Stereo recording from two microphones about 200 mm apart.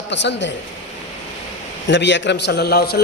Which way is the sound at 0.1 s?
60° left (ahead or behind).